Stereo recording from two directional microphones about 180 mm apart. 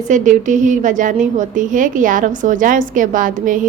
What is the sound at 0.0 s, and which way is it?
A woman's voice, 45° right (ahead or behind).